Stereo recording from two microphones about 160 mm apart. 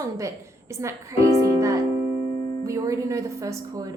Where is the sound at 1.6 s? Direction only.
20° right (ahead or behind).